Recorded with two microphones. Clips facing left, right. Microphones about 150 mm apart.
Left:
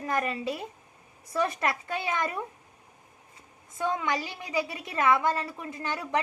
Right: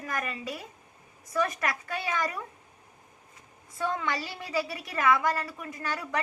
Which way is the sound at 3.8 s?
15° left (ahead or behind).